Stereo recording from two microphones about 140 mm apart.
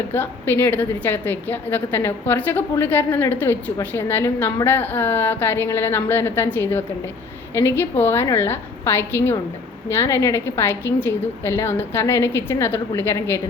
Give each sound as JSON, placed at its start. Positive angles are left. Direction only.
{"t": 0.1, "sound": "a woman's voice", "side_deg": 15}